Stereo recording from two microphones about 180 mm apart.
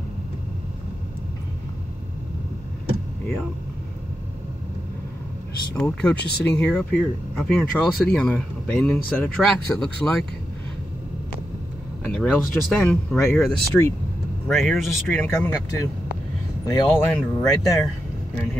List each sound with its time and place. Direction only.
5.8 s speech: 5° left (ahead or behind)
6.1 s speech: 65° left (ahead or behind)
6.5 s speech: 5° left (ahead or behind)
12.0 s speech: 5° left (ahead or behind)
14.6 s speech: centre (ahead or behind); by 17.8 s 20° left (ahead or behind)